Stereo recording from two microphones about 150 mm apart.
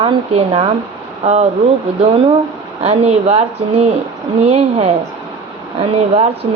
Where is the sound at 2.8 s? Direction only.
45° right (ahead or behind).